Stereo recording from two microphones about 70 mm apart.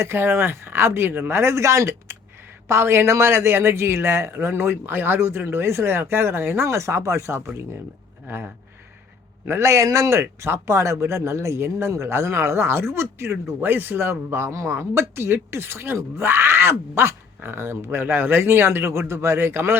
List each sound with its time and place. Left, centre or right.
0.0 s speech: right